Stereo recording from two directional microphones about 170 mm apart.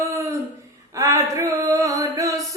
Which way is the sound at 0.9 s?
20° right (ahead or behind).